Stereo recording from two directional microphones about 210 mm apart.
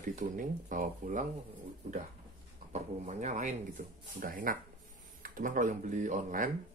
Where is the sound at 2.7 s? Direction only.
35° right (ahead or behind).